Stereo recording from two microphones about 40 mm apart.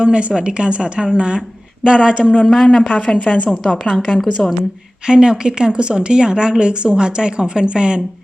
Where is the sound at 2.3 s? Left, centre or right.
Centre.